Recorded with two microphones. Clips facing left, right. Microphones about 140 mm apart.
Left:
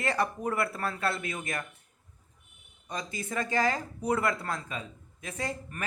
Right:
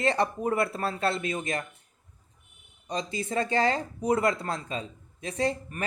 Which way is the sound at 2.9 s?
25° right (ahead or behind).